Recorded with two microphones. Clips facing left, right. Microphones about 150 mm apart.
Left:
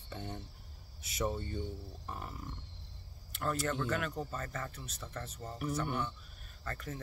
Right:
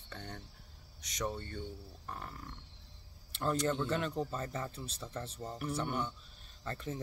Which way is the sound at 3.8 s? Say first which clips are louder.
Right 1 dB; 30° right (ahead or behind).